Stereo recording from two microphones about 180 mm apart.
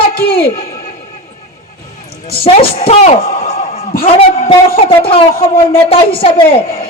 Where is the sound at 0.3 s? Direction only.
30° left (ahead or behind).